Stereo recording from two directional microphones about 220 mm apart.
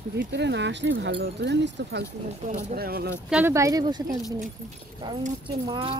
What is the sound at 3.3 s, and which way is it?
Speech, 10° right (ahead or behind).